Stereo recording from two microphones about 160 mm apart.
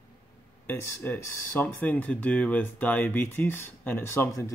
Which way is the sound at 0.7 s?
10° left (ahead or behind).